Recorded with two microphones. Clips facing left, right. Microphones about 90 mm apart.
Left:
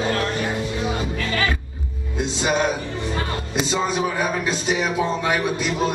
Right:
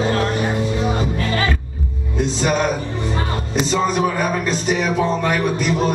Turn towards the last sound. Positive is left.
turn(degrees=0)  # may be behind; listen again after turning